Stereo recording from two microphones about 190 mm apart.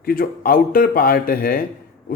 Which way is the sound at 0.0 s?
50° left (ahead or behind).